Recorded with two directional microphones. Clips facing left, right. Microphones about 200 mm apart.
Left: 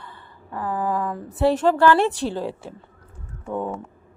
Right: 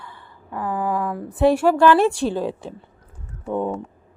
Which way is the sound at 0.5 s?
15° right (ahead or behind).